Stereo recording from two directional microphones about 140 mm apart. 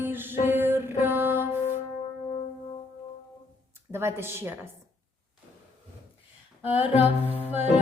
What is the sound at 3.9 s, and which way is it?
Speech, 15° right (ahead or behind).